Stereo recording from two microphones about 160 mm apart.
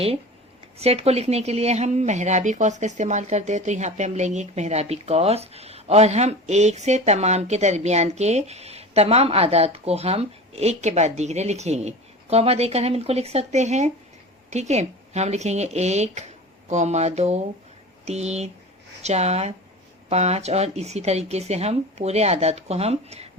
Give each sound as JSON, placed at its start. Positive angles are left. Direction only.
{"t": 0.8, "sound": "speech", "side_deg": -40}